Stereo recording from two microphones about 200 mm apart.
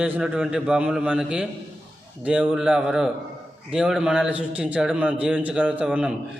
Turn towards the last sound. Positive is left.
turn(degrees=-5)  # may be behind; listen again after turning